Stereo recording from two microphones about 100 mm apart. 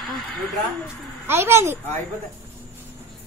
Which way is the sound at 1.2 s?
25° right (ahead or behind).